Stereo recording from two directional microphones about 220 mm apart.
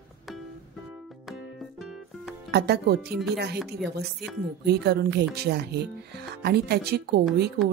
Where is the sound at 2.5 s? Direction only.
50° right (ahead or behind).